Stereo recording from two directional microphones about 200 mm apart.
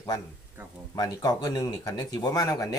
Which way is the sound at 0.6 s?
10° right (ahead or behind).